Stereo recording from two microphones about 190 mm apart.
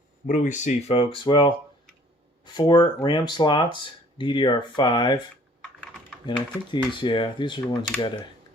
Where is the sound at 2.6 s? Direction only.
20° left (ahead or behind).